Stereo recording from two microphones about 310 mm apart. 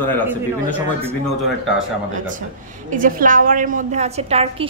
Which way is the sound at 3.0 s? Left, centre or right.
Right.